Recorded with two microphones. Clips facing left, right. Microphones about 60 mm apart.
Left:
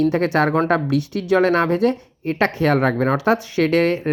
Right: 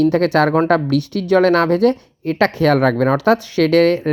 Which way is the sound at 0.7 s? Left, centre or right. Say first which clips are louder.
Right 3 dB; right.